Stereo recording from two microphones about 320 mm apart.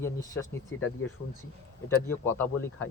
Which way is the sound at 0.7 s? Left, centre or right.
Left.